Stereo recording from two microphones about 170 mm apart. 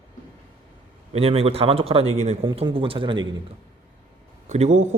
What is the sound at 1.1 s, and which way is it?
Speech, 35° right (ahead or behind).